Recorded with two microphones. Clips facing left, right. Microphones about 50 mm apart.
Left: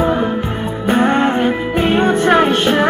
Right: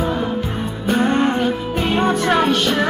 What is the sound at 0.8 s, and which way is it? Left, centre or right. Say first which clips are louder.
Music: left 3 dB; left.